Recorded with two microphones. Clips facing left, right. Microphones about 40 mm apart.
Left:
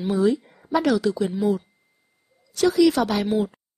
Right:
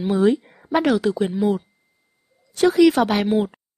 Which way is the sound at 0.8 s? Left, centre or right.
Right.